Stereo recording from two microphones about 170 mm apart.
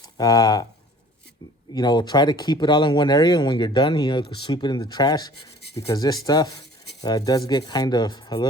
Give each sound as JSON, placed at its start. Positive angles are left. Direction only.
{"t": 0.2, "sound": "speech", "side_deg": 20}
{"t": 1.7, "sound": "speech", "side_deg": 25}